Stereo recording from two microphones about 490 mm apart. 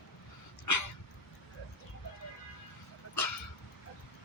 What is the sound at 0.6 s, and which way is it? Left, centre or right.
Dog, left.